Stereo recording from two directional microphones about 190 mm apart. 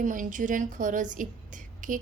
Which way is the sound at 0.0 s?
45° right (ahead or behind).